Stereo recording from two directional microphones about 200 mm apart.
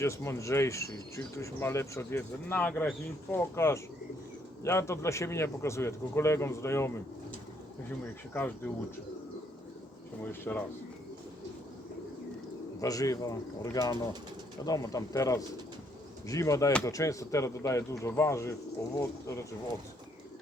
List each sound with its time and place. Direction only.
0.0 s speech: 15° left (ahead or behind)
8.3 s speech: 10° left (ahead or behind)
10.5 s speech: 5° left (ahead or behind)
12.8 s speech: 15° left (ahead or behind)